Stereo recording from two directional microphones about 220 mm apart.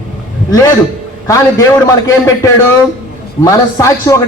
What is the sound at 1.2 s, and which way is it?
Speech, 15° left (ahead or behind).